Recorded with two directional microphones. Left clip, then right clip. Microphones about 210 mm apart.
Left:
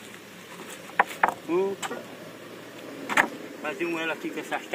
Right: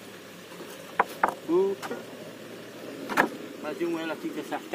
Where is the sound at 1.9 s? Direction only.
50° right (ahead or behind).